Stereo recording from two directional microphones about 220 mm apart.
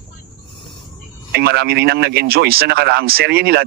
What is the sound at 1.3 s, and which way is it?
Speech, 45° right (ahead or behind).